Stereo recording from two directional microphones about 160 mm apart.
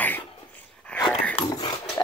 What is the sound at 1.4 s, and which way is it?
Dog, 25° left (ahead or behind).